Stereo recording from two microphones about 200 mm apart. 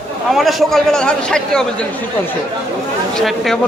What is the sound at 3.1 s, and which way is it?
Speech, centre (ahead or behind).